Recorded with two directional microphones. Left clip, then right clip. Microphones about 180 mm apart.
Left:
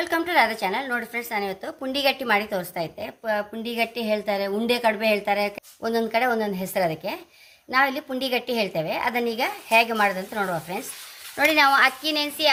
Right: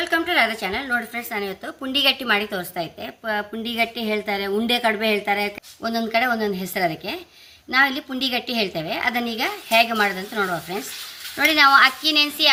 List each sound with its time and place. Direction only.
0.0 s a woman's voice: 45° left (ahead or behind)